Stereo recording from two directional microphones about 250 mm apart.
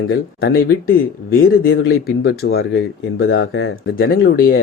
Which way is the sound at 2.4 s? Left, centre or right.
Left.